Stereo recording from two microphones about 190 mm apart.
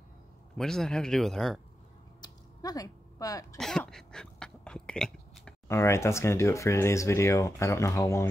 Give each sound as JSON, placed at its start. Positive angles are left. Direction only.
{"t": 0.6, "sound": "speech", "side_deg": 0}
{"t": 2.2, "sound": "a sound", "side_deg": 20}
{"t": 3.5, "sound": "throat clearing", "side_deg": 5}
{"t": 5.7, "sound": "speech", "side_deg": 15}